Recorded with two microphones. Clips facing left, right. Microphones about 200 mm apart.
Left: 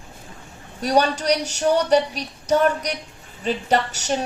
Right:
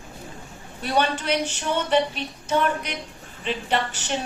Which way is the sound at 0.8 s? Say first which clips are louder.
Left 4 dB; 40° left (ahead or behind).